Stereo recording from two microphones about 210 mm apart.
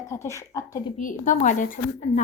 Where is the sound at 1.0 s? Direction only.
40° left (ahead or behind).